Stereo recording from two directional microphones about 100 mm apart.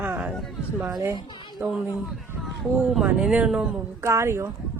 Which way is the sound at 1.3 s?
50° left (ahead or behind).